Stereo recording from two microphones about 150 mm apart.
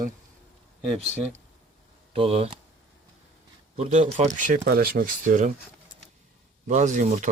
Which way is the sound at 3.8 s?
45° right (ahead or behind).